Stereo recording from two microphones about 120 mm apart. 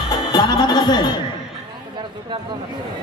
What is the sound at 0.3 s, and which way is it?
Music, 35° left (ahead or behind).